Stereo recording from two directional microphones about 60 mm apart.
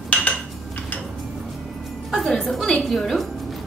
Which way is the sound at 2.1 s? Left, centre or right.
Centre.